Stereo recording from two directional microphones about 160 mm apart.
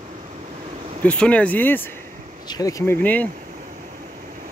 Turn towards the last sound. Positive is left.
turn(degrees=10)  # may be behind; listen again after turning